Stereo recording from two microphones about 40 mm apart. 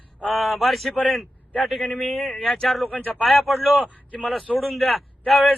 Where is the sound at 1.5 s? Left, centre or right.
Left.